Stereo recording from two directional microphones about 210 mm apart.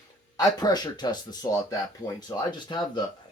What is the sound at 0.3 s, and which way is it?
Speech, 20° left (ahead or behind).